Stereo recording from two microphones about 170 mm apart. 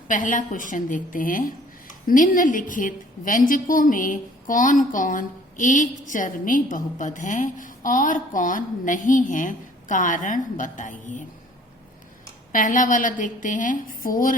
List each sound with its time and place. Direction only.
0.1 s a woman's voice: 50° left (ahead or behind)
12.5 s a woman's voice: 50° left (ahead or behind)